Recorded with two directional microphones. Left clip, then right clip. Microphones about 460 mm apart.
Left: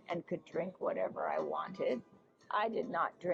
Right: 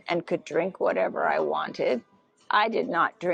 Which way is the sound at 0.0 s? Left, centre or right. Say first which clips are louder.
Right 12 dB; right.